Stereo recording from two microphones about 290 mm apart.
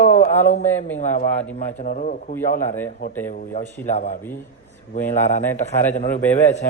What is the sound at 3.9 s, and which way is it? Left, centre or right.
Speech, left.